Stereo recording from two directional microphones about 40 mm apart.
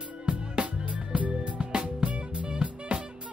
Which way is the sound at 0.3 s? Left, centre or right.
Right.